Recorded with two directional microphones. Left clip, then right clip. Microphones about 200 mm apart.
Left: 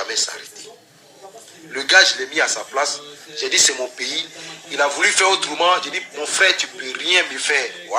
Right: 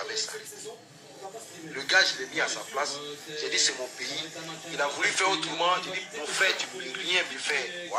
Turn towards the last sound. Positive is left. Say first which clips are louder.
# left 10 dB
turn(degrees=50)  # may be behind; listen again after turning